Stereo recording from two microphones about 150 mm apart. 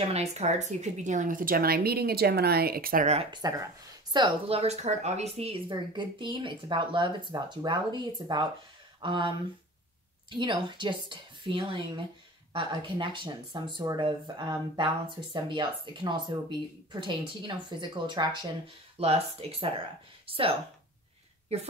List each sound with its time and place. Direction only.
0.1 s speech: 45° right (ahead or behind); by 3.1 s 75° right (ahead or behind)
3.3 s speech: 25° right (ahead or behind)
10.3 s speech: 30° right (ahead or behind)
19.0 s speech: 45° right (ahead or behind)